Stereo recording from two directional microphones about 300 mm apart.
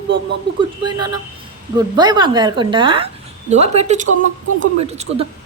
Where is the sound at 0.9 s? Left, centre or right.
Centre.